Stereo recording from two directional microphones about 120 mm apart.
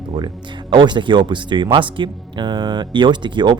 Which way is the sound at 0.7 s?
40° right (ahead or behind).